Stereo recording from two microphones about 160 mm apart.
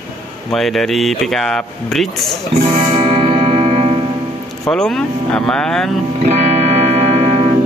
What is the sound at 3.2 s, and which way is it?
Music, 35° right (ahead or behind).